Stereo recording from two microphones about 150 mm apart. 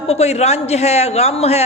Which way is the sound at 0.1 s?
45° left (ahead or behind).